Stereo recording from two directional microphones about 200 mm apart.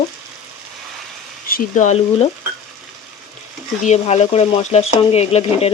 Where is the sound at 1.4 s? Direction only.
40° left (ahead or behind).